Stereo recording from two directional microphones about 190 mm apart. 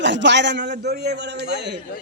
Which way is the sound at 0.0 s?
70° right (ahead or behind).